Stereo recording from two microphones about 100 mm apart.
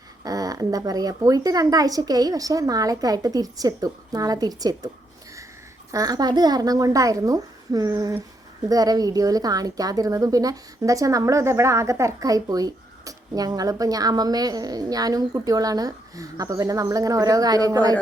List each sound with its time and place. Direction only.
0.3 s speech: 35° right (ahead or behind)
5.9 s speech: 35° right (ahead or behind)